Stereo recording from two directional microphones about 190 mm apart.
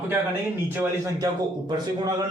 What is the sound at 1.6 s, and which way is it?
Speech, 20° right (ahead or behind).